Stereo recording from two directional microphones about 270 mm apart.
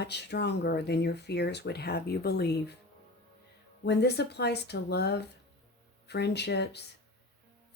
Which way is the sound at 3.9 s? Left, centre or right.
Left.